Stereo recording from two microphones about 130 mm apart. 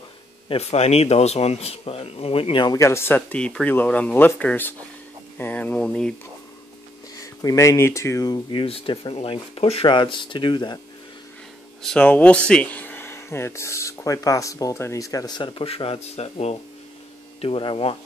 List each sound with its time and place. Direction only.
0.5 s speech: 55° left (ahead or behind)
2.7 s speech: 20° left (ahead or behind)
3.2 s speech: 10° left (ahead or behind)
7.2 s speech: 25° left (ahead or behind)
8.5 s speech: 40° left (ahead or behind)
11.8 s speech: 5° left (ahead or behind); by 17.9 s 45° left (ahead or behind)